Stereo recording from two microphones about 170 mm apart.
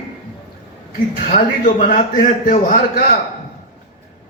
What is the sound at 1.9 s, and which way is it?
Speech, 50° left (ahead or behind).